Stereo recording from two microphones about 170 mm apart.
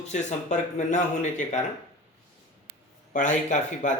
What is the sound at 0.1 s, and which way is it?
Speech, 45° left (ahead or behind).